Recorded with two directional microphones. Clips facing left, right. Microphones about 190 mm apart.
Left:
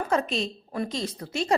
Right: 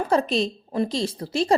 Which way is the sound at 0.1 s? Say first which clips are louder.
Right 5 dB; 35° right (ahead or behind).